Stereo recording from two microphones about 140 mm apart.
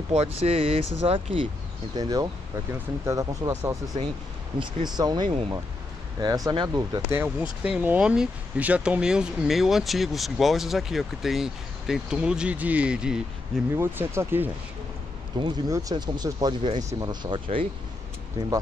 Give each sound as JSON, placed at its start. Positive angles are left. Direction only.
{"t": 0.1, "sound": "speech", "side_deg": -45}
{"t": 2.0, "sound": "speech", "side_deg": -25}
{"t": 7.1, "sound": "speech", "side_deg": -15}
{"t": 13.7, "sound": "speech", "side_deg": -20}
{"t": 15.3, "sound": "speech", "side_deg": -30}
{"t": 18.4, "sound": "speech", "side_deg": -25}